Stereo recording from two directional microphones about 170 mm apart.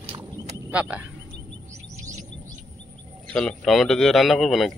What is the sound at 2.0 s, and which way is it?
Chirp, 45° right (ahead or behind).